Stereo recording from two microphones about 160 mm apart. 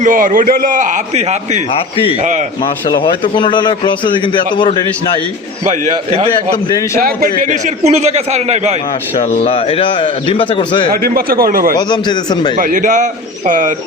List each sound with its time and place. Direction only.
0.0 s a man's voice: 55° right (ahead or behind)
2.9 s a man's voice: 30° left (ahead or behind)
5.6 s a man's voice: 45° right (ahead or behind)
6.7 s a man's voice: 25° left (ahead or behind)
7.0 s a man's voice: 60° right (ahead or behind); by 8.7 s 45° right (ahead or behind)
9.3 s a man's voice: 40° left (ahead or behind)
10.9 s speech: 70° right (ahead or behind)
11.8 s a man's voice: 25° left (ahead or behind)
12.5 s a man's voice: 60° right (ahead or behind)